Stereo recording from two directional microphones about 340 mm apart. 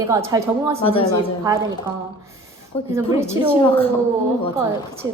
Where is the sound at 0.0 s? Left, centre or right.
Centre.